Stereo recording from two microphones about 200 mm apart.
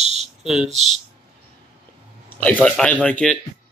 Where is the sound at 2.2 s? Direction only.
10° left (ahead or behind).